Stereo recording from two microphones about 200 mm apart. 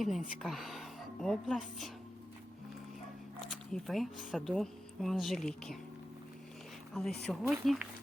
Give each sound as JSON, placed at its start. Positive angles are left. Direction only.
{"t": 0.0, "sound": "speech", "side_deg": 0}
{"t": 3.5, "sound": "speech", "side_deg": 0}
{"t": 6.9, "sound": "speech", "side_deg": 0}